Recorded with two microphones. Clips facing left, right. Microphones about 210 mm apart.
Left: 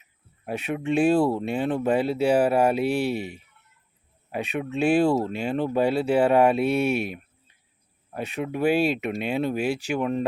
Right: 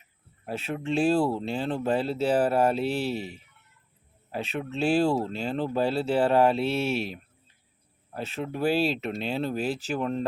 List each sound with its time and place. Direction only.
0.4 s speech: 15° left (ahead or behind)
4.3 s speech: 15° left (ahead or behind)
8.1 s speech: 15° left (ahead or behind)